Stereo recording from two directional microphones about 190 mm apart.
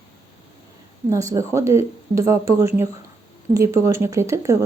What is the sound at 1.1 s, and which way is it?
Speech, 15° right (ahead or behind).